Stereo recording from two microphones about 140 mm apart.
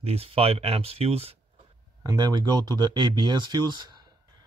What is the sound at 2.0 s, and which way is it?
Speech, 25° right (ahead or behind).